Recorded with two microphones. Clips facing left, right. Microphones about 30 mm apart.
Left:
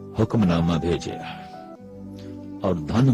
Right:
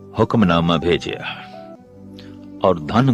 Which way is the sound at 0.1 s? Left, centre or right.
Right.